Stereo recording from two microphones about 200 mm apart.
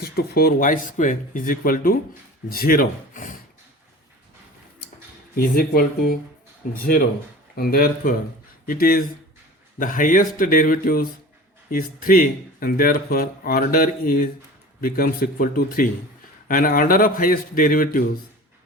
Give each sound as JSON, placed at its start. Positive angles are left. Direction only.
{"t": 0.0, "sound": "speech", "side_deg": 50}
{"t": 5.4, "sound": "speech", "side_deg": 50}
{"t": 7.5, "sound": "speech", "side_deg": 50}